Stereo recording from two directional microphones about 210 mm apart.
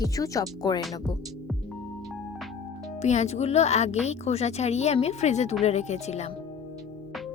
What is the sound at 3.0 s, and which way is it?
A woman's voice, 30° left (ahead or behind).